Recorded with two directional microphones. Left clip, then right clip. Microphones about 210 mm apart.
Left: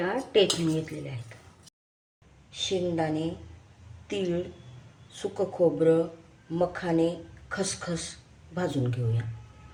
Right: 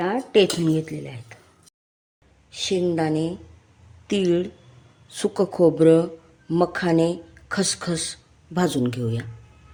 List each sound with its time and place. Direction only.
0.0 s speech: 45° right (ahead or behind)
2.5 s speech: 50° right (ahead or behind)